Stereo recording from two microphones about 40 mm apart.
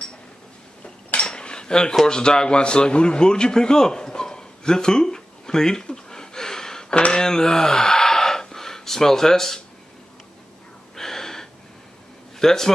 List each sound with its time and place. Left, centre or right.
0.8 s cutlery: left
2.0 s a sound: centre
7.1 s gasp: centre
11.0 s gasp: centre
12.4 s a man's voice: centre